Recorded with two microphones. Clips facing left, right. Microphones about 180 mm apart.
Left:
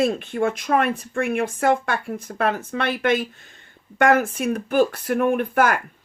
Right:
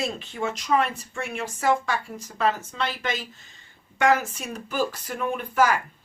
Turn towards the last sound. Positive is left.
turn(degrees=55)  # may be behind; listen again after turning